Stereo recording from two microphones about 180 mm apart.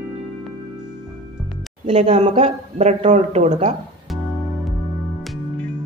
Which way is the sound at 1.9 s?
35° right (ahead or behind).